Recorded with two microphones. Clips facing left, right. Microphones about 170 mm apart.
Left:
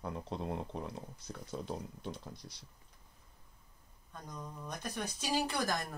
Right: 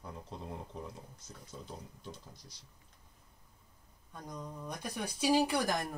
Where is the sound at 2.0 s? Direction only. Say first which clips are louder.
Left 5 dB; 60° left (ahead or behind).